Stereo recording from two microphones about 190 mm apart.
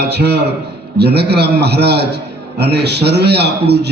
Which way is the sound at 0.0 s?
60° right (ahead or behind).